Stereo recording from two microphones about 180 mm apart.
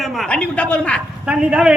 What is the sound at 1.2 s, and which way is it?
Speech, 5° right (ahead or behind).